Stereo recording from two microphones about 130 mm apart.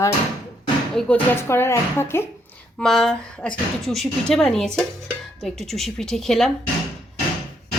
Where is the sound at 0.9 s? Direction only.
5° left (ahead or behind).